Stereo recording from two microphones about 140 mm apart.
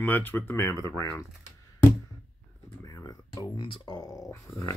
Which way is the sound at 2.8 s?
25° left (ahead or behind).